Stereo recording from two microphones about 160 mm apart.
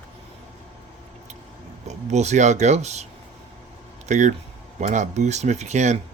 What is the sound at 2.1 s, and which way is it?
Speech, 45° right (ahead or behind).